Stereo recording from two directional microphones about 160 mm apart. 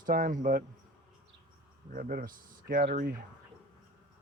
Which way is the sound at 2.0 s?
65° right (ahead or behind).